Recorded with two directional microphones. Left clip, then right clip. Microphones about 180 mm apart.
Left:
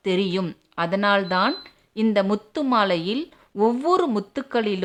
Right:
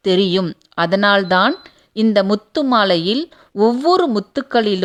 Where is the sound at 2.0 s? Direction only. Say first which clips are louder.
Right 6 dB; 30° right (ahead or behind).